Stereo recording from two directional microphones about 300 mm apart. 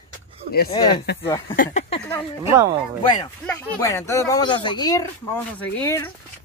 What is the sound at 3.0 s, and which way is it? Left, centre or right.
Speech, centre.